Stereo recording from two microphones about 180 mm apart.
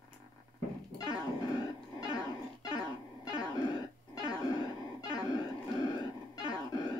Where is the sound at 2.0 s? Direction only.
20° left (ahead or behind).